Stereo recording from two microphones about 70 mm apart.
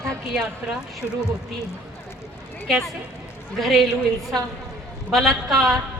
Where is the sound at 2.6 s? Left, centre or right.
Centre.